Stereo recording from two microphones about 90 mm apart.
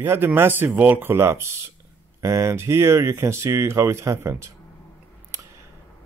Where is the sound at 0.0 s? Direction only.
25° right (ahead or behind).